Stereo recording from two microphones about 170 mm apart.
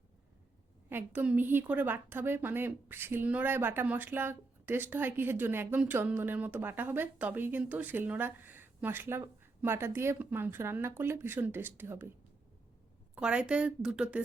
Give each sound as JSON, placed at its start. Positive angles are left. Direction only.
{"t": 0.9, "sound": "a woman's voice", "side_deg": -10}
{"t": 13.1, "sound": "a woman's voice", "side_deg": -5}